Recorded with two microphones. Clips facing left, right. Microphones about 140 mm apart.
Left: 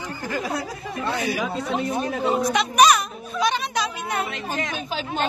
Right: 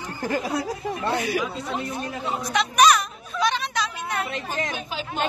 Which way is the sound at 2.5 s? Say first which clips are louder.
Right 1 dB; 5° left (ahead or behind).